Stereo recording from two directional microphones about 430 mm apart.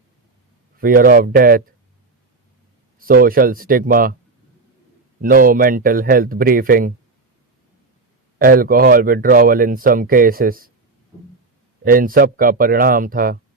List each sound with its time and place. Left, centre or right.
0.8 s speech: centre
3.0 s speech: centre
5.2 s speech: centre
8.4 s speech: centre
11.8 s speech: centre